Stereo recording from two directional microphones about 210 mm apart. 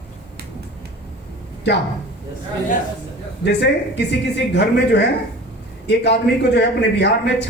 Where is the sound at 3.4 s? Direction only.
55° left (ahead or behind).